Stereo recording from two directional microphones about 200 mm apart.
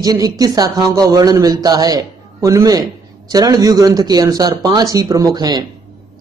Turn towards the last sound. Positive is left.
turn(degrees=-20)  # may be behind; listen again after turning